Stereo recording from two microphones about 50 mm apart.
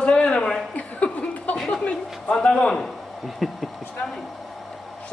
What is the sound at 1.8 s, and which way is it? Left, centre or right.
A man's voice, left.